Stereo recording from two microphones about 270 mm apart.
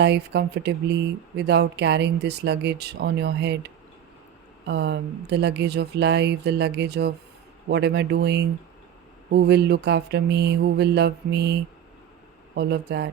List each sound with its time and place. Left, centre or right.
0.0 s speech: right